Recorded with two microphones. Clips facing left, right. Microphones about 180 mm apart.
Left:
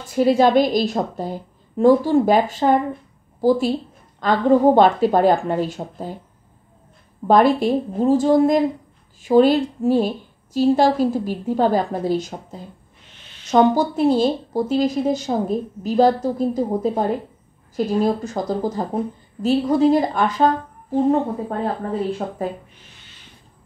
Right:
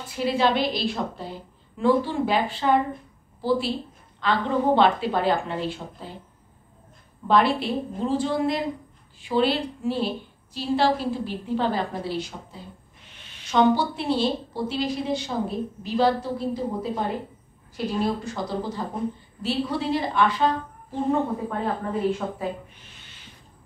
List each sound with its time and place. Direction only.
0.1 s speech: 45° left (ahead or behind)
7.2 s a woman's voice: 45° left (ahead or behind)